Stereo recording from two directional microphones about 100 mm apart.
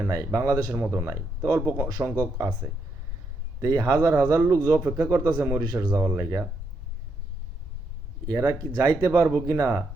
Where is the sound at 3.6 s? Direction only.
40° right (ahead or behind).